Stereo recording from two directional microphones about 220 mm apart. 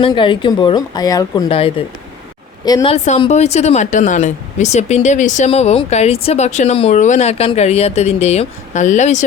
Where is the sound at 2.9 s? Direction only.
30° left (ahead or behind).